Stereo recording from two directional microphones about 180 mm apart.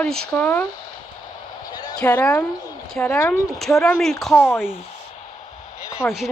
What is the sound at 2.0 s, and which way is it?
Speech, 10° left (ahead or behind).